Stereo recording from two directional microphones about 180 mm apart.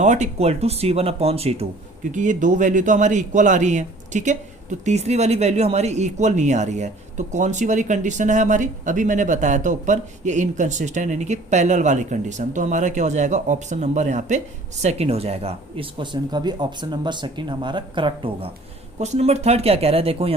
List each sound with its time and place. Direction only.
0.0 s a man's voice: 40° right (ahead or behind)